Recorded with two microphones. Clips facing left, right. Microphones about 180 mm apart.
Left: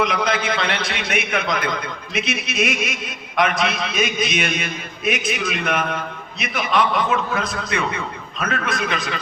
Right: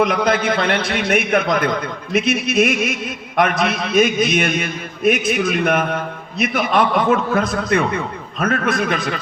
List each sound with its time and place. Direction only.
0.0 s a man's voice: 50° right (ahead or behind)